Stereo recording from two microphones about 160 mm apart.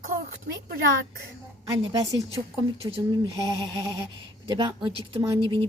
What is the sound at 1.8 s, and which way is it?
A woman's voice, 30° right (ahead or behind).